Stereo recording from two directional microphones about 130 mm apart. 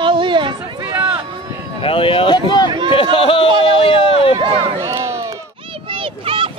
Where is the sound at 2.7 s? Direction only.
35° right (ahead or behind).